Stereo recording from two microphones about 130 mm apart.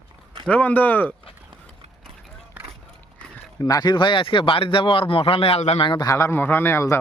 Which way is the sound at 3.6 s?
30° left (ahead or behind).